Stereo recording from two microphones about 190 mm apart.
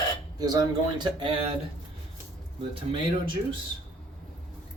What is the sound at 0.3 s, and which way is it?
Speech, 20° right (ahead or behind).